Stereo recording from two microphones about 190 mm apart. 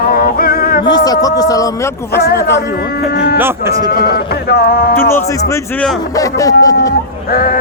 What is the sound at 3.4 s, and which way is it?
Speech, 10° right (ahead or behind).